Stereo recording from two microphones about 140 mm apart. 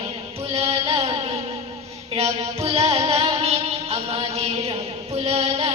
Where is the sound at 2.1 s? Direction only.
45° right (ahead or behind).